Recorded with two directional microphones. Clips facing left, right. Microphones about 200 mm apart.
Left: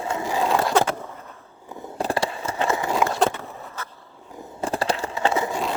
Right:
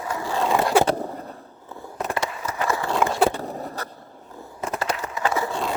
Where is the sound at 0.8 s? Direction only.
35° right (ahead or behind).